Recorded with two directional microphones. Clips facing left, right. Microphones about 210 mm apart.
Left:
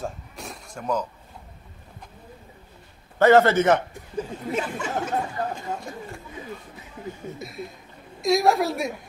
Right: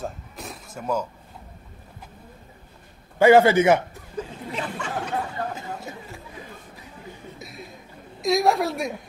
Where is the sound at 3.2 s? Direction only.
10° right (ahead or behind).